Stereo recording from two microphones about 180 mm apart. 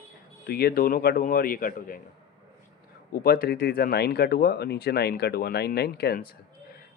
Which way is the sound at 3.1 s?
60° left (ahead or behind).